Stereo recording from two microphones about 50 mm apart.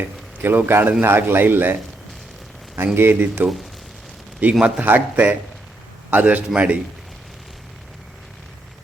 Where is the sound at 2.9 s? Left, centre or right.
Right.